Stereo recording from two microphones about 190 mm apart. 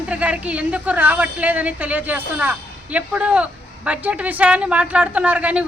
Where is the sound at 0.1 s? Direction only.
5° right (ahead or behind).